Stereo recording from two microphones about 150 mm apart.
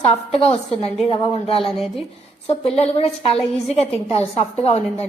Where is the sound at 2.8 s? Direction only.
45° left (ahead or behind).